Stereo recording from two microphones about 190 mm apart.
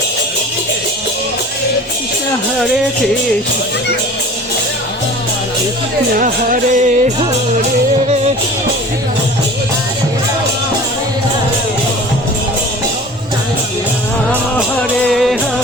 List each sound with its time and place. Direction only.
6.1 s music: 45° right (ahead or behind)
14.8 s music: 5° left (ahead or behind)